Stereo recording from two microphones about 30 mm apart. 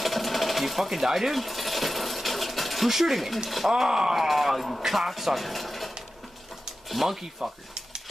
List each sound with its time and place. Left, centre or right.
0.0 s sewing machine: centre
2.9 s speech: centre
3.7 s speech: centre
7.2 s speech: centre